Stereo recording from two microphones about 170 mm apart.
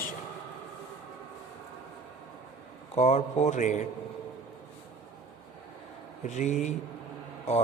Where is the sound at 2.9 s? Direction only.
40° left (ahead or behind).